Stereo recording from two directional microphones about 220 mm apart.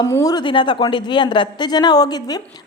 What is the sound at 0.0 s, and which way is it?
Speech, 15° left (ahead or behind).